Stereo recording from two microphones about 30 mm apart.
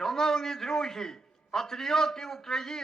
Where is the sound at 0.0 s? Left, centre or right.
Centre.